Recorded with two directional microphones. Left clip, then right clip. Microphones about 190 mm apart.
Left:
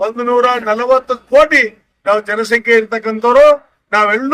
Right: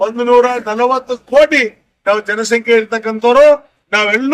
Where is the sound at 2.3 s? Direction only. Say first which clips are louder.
Even; centre (ahead or behind).